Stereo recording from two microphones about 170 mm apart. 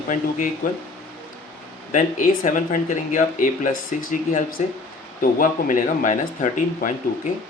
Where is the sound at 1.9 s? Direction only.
50° left (ahead or behind).